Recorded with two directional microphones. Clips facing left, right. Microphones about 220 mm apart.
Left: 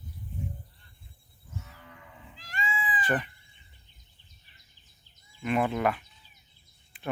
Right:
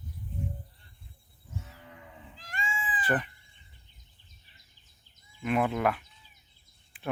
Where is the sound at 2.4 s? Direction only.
50° right (ahead or behind).